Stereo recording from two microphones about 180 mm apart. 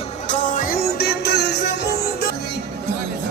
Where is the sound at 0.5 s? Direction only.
55° left (ahead or behind).